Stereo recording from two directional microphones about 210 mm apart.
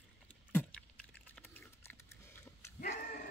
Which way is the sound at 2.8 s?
40° left (ahead or behind).